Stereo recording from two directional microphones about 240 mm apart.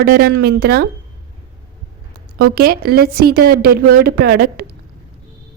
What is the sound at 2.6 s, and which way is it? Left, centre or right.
A woman's voice, right.